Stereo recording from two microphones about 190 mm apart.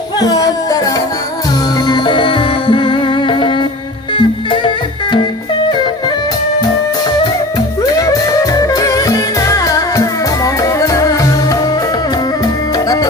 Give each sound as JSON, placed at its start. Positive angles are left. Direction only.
{"t": 0.2, "sound": "music", "side_deg": 20}
{"t": 7.9, "sound": "music", "side_deg": 20}